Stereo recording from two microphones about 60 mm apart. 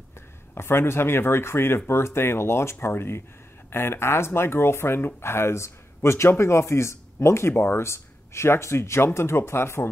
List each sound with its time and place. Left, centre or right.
0.6 s speech: left